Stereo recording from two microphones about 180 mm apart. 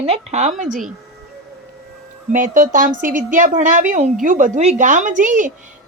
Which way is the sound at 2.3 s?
45° right (ahead or behind).